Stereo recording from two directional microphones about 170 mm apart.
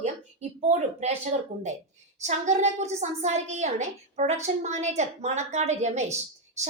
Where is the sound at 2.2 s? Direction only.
40° right (ahead or behind).